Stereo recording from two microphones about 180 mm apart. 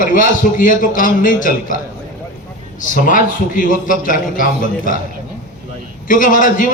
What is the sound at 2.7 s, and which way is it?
A man's voice, 45° left (ahead or behind).